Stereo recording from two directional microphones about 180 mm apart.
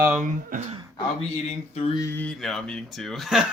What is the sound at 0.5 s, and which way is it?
Speech, 40° right (ahead or behind).